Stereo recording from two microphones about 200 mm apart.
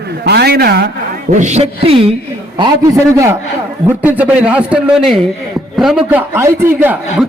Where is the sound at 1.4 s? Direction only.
35° right (ahead or behind).